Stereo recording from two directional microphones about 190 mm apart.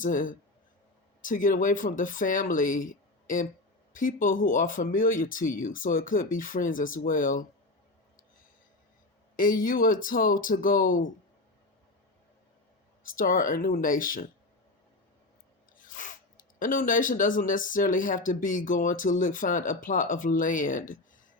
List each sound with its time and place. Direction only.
0.0 s speech: 45° left (ahead or behind)
9.3 s speech: 45° left (ahead or behind)
13.1 s speech: 45° left (ahead or behind)
15.8 s speech: 45° left (ahead or behind)